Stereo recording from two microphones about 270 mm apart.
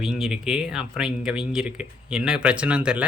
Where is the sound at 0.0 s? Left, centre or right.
Centre.